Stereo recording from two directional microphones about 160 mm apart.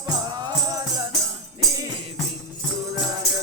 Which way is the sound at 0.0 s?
25° right (ahead or behind).